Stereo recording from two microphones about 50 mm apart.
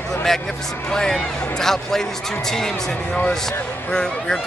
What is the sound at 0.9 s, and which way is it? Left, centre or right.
Speech, centre.